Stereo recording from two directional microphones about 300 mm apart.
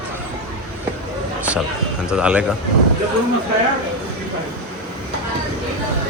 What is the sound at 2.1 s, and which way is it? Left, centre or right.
Speech, centre.